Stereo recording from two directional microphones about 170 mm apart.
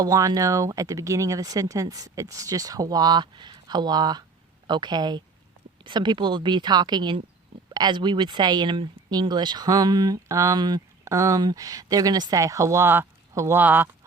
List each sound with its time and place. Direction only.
0.0 s speech: 20° right (ahead or behind)